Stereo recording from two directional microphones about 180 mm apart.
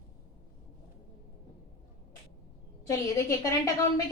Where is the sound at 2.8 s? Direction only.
20° left (ahead or behind).